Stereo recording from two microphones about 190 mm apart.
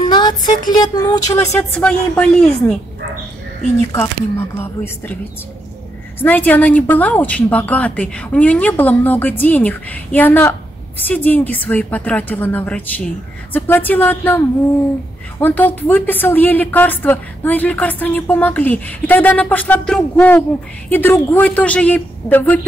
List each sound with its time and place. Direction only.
0.0 s speech: 20° left (ahead or behind)
1.6 s speech: 10° left (ahead or behind)
3.9 s speech: 10° left (ahead or behind)
15.4 s speech: 10° left (ahead or behind)